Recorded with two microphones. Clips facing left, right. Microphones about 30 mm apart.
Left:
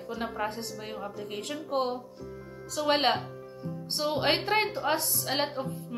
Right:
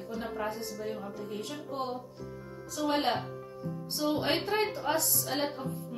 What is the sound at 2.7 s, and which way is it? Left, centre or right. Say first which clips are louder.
Speech: left 4 dB; left.